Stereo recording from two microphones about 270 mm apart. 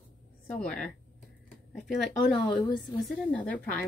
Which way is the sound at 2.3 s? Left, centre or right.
Centre.